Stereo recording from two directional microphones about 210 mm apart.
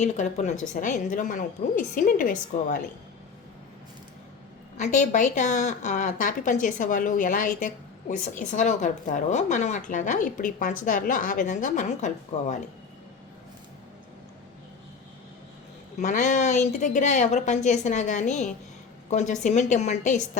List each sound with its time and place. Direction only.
0.0 s a woman's voice: 35° left (ahead or behind)
4.8 s a woman's voice: 35° left (ahead or behind)
16.0 s a woman's voice: 35° left (ahead or behind)